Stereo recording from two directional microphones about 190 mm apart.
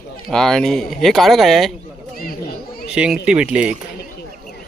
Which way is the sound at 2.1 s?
50° left (ahead or behind).